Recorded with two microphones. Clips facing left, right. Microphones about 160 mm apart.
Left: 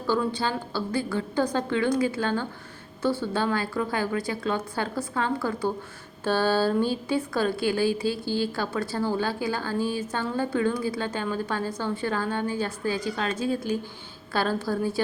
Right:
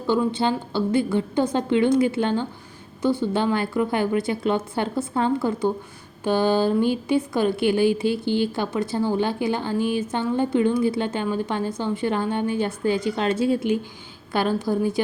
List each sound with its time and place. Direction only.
0.1 s a woman's voice: 20° right (ahead or behind)
6.2 s a sound: 15° right (ahead or behind)
7.1 s a woman's voice: 20° right (ahead or behind)